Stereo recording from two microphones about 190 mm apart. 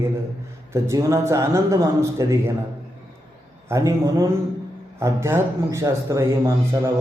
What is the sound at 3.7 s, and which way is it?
Speech, 15° right (ahead or behind).